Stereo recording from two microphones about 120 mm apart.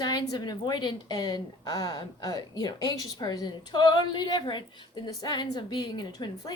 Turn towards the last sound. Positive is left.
turn(degrees=35)  # may be behind; listen again after turning